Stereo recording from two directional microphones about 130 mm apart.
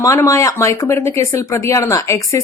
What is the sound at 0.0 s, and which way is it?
Speech, 25° left (ahead or behind).